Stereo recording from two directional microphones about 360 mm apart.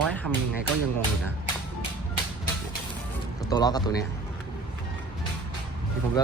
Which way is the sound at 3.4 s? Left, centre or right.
Centre.